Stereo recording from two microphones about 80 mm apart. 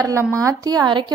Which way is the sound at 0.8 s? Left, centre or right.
Right.